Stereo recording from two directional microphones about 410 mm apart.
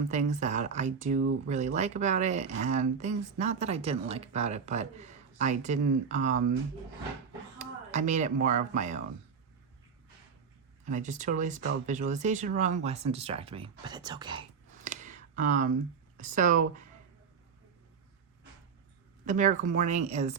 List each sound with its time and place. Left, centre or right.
0.1 s speech: centre
7.6 s speech: centre
10.8 s speech: centre
19.2 s speech: centre